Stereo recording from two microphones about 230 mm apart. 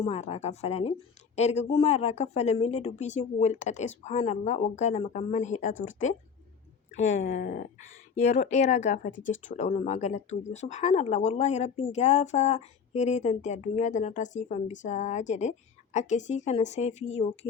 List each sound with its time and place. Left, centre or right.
0.0 s speech: left
7.2 s speech: left
9.1 s speech: left
9.4 s speech: left